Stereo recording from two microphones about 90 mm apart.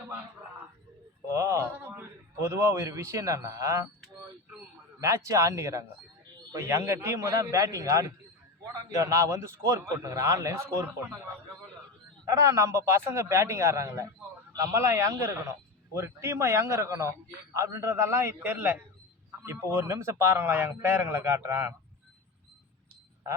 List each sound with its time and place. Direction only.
1.3 s a man's voice: 35° right (ahead or behind)
4.9 s a man's voice: 35° right (ahead or behind)
12.2 s a man's voice: 35° right (ahead or behind)